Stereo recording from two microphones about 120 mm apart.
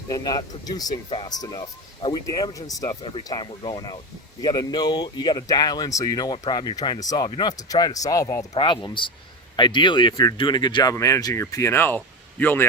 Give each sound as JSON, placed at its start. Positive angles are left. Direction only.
{"t": 0.1, "sound": "speech", "side_deg": 35}
{"t": 3.2, "sound": "speech", "side_deg": 40}
{"t": 8.5, "sound": "speech", "side_deg": 45}
{"t": 10.9, "sound": "speech", "side_deg": 25}